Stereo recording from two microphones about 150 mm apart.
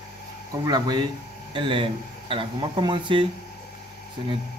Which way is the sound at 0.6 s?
30° right (ahead or behind).